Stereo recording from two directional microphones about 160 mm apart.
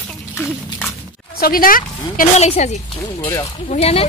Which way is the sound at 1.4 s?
65° left (ahead or behind).